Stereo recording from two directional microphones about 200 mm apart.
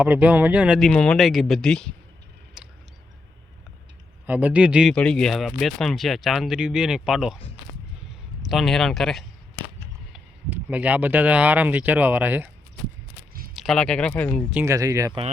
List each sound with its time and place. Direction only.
0.0 s speech: 5° right (ahead or behind)
2.6 s a sound: 5° right (ahead or behind)
4.3 s speech: 10° right (ahead or behind)
8.4 s speech: centre (ahead or behind)
13.5 s speech: centre (ahead or behind)
14.5 s speech: 15° right (ahead or behind)